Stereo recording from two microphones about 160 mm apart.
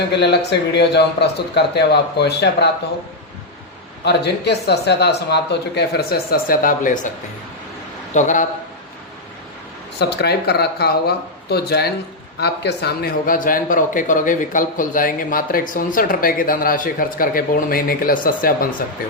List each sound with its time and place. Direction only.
0.1 s speech: 90° left
4.0 s speech: 90° left; by 7.1 s 55° left (ahead or behind)
8.1 s a man's voice: 50° left (ahead or behind)
10.0 s speech: 90° left; by 18.7 s 60° left (ahead or behind)